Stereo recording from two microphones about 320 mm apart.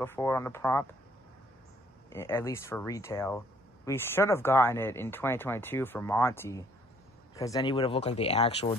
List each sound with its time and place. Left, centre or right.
0.0 s speech: centre
2.0 s speech: centre